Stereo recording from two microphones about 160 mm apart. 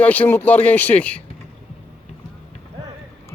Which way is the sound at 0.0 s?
10° left (ahead or behind).